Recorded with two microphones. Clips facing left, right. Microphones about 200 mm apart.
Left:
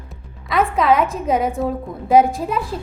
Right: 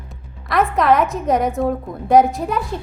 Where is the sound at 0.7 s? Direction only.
Centre (ahead or behind).